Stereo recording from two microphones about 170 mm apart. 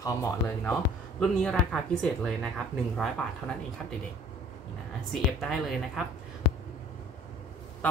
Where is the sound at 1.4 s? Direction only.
5° left (ahead or behind).